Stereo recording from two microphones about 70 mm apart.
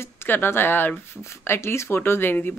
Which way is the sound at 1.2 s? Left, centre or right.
Left.